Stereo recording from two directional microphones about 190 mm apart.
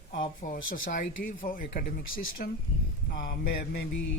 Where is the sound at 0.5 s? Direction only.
90° left.